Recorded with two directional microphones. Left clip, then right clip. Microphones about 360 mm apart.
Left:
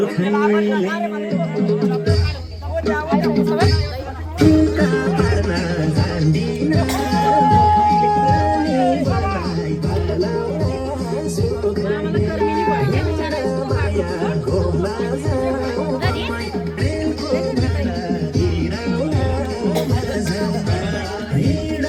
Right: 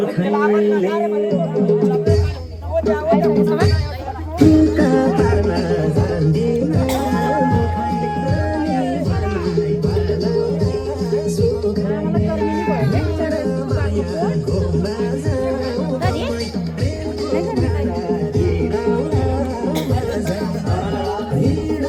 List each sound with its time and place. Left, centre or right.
0.3 s a man's voice: right
4.4 s music: right